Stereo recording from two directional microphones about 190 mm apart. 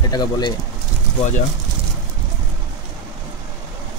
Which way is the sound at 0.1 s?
20° left (ahead or behind).